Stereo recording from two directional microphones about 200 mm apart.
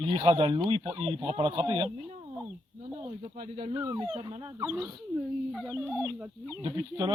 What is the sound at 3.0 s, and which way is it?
Speech, 25° right (ahead or behind).